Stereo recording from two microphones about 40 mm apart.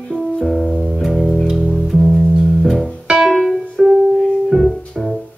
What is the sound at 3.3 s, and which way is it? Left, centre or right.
Music, centre.